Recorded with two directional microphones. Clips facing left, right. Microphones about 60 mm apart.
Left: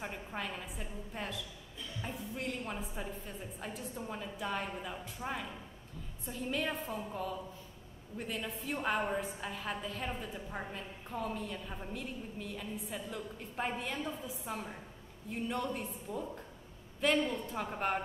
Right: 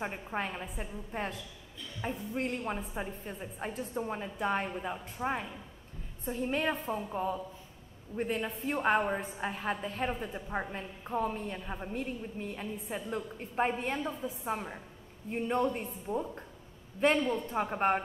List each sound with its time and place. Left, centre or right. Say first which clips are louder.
0.0 s a woman's voice: right 5 dB; right